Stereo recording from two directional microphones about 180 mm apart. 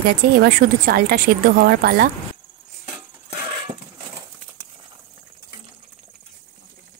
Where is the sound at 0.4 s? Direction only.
55° right (ahead or behind).